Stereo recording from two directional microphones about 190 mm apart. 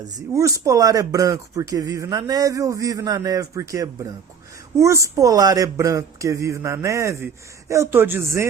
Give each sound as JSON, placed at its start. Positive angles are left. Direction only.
{"t": 0.3, "sound": "speech", "side_deg": -15}